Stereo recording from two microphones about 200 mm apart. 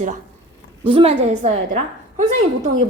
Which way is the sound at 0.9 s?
25° right (ahead or behind).